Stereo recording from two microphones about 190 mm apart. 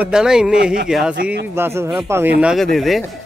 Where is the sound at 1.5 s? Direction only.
15° right (ahead or behind).